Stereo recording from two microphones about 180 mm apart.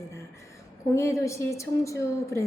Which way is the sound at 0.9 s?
15° left (ahead or behind).